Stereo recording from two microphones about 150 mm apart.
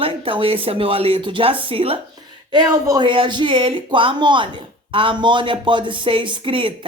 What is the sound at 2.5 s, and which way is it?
Speech, 25° right (ahead or behind).